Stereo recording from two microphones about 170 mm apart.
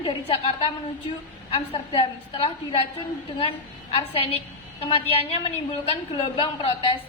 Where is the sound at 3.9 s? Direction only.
35° left (ahead or behind).